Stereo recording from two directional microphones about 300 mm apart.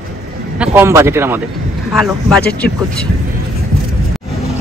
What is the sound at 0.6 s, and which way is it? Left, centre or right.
Speech, centre.